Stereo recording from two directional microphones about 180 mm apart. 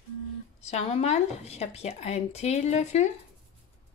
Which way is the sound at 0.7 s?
35° left (ahead or behind).